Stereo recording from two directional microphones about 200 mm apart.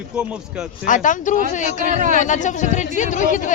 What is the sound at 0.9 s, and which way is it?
Speech, 40° left (ahead or behind).